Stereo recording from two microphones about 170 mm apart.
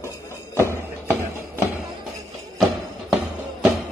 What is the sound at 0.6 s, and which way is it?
Music, 15° right (ahead or behind).